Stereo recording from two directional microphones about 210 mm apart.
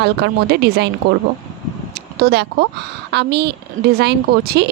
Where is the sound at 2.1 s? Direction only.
50° right (ahead or behind).